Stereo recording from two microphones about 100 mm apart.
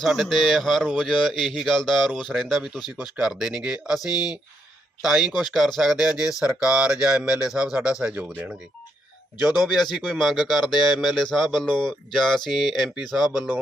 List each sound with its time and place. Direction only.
0.0 s speech: centre (ahead or behind)
4.0 s speech: 40° left (ahead or behind)
5.0 s speech: 5° right (ahead or behind)
9.6 s speech: centre (ahead or behind)